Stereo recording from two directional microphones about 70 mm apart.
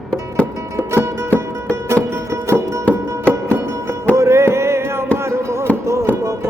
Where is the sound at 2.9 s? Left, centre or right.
Right.